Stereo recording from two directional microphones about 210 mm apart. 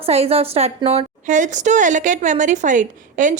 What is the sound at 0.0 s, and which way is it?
A woman's voice, 30° right (ahead or behind).